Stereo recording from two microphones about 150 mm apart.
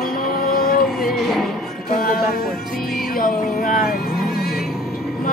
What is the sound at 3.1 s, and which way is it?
Speech, 65° left (ahead or behind).